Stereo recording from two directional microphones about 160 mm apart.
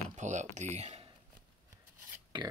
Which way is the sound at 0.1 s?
50° right (ahead or behind).